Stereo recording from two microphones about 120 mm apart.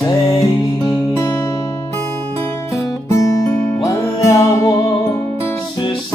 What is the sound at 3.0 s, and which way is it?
Music, 25° left (ahead or behind).